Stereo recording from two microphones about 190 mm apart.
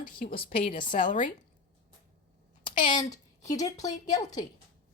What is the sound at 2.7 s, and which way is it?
Speech, 45° left (ahead or behind).